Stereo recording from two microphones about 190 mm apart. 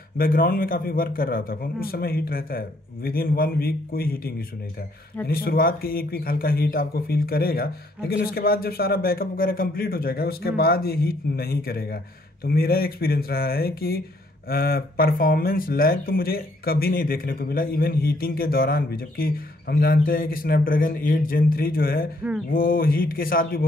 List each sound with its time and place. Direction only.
0.2 s speech: 50° left (ahead or behind)